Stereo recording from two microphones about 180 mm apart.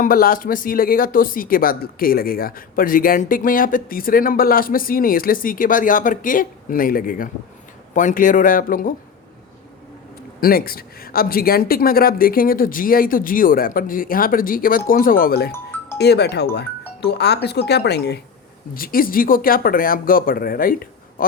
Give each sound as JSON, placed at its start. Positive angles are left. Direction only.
{"t": 0.0, "sound": "speech", "side_deg": 50}
{"t": 10.4, "sound": "speech", "side_deg": 55}
{"t": 18.7, "sound": "speech", "side_deg": 55}